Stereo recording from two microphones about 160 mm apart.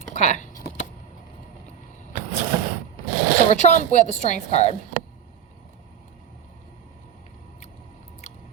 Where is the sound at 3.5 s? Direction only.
50° left (ahead or behind).